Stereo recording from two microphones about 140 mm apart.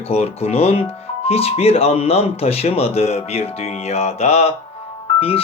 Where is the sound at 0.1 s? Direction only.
50° left (ahead or behind).